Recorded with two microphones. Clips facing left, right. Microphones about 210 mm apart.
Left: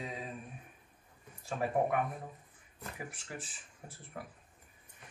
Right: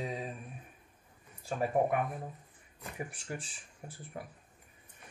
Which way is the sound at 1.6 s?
Centre (ahead or behind).